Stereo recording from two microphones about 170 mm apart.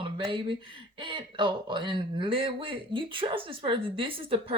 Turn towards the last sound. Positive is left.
turn(degrees=-30)  # may be behind; listen again after turning